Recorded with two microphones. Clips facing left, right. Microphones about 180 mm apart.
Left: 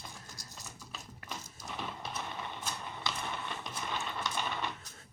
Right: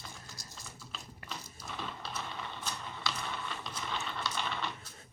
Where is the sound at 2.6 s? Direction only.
15° left (ahead or behind).